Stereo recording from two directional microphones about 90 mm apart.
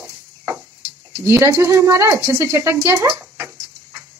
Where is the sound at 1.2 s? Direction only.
30° right (ahead or behind).